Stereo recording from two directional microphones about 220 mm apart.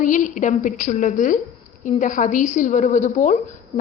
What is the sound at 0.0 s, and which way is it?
A woman's voice, 35° left (ahead or behind).